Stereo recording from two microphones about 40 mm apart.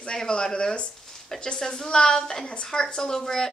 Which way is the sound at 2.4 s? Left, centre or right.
Left.